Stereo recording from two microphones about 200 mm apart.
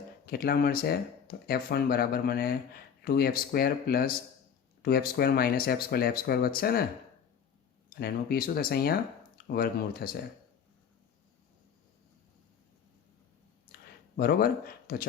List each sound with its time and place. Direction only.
0.3 s speech: 50° left (ahead or behind)
7.9 s speech: 50° left (ahead or behind)
13.7 s a sound: 50° left (ahead or behind)
14.2 s speech: 50° left (ahead or behind)